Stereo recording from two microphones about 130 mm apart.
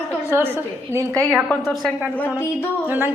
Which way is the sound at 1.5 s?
Centre (ahead or behind).